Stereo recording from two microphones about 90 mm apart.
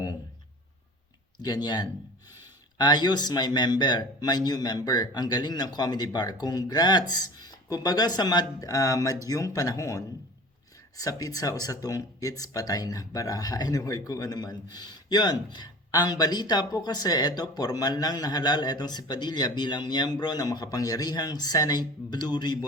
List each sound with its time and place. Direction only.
1.4 s speech: 50° left (ahead or behind)
11.2 s speech: 40° left (ahead or behind)